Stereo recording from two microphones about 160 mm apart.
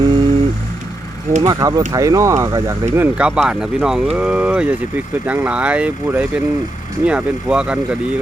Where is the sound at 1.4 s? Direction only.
25° right (ahead or behind).